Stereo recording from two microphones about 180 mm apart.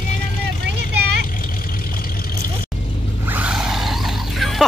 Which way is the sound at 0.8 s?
50° left (ahead or behind).